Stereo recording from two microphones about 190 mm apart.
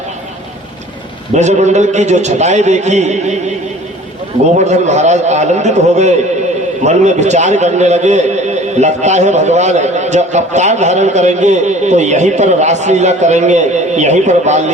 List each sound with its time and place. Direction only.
1.4 s a man's voice: 35° right (ahead or behind)
4.5 s a man's voice: 35° right (ahead or behind)